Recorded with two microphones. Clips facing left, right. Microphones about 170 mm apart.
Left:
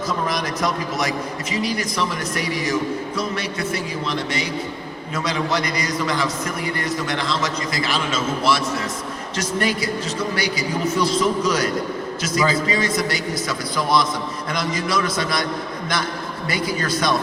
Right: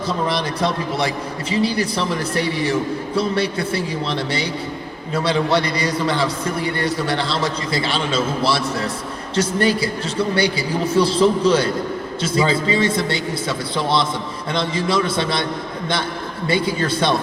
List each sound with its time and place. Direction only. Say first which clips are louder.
0.1 s a man's voice: right 3 dB; 30° right (ahead or behind)
16.5 s a man's voice: right 4 dB; 25° right (ahead or behind)